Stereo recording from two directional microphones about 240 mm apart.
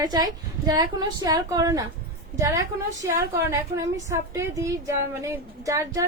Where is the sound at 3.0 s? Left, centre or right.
Centre.